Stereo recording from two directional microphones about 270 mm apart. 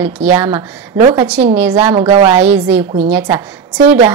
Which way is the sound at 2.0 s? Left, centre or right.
Right.